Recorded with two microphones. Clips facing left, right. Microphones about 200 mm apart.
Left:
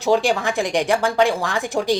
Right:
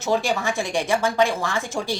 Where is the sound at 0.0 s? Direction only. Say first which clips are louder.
Left 4 dB; 15° left (ahead or behind).